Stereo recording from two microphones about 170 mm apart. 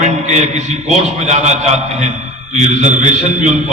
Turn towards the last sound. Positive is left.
turn(degrees=-45)  # may be behind; listen again after turning